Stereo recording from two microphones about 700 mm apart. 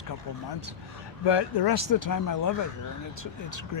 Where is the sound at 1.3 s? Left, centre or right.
Left.